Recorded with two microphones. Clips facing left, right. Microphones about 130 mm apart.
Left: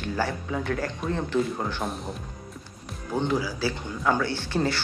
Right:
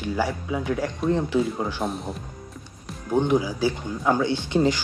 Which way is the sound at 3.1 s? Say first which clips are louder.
Right 5 dB; 15° right (ahead or behind).